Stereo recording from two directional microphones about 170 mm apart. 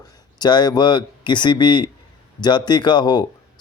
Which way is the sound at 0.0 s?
25° left (ahead or behind).